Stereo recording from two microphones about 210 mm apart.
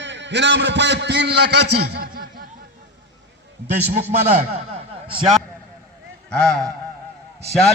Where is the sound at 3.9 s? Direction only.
35° right (ahead or behind).